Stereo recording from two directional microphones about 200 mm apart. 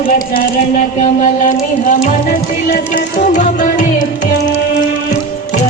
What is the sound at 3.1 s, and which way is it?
Music, 40° left (ahead or behind).